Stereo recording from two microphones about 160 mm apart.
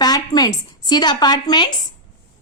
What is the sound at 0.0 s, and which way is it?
Speech, 25° left (ahead or behind).